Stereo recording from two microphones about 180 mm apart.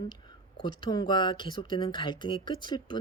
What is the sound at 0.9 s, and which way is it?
Speech, 25° left (ahead or behind).